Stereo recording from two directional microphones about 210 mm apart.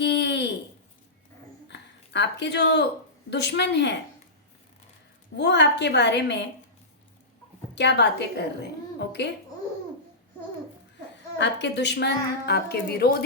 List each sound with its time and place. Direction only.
0.0 s a sound: 55° left (ahead or behind)
1.6 s a sound: 55° left (ahead or behind)
3.2 s a woman's voice: 55° left (ahead or behind)
5.4 s a woman's voice: 55° left (ahead or behind)
7.8 s a woman's voice: 55° left (ahead or behind)
11.3 s a woman's voice: 55° left (ahead or behind)